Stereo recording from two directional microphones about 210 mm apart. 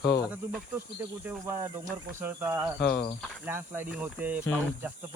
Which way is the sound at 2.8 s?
50° left (ahead or behind).